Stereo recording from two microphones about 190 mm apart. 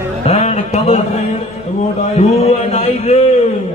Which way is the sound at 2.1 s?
30° left (ahead or behind).